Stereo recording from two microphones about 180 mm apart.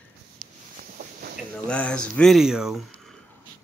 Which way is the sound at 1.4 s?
5° left (ahead or behind).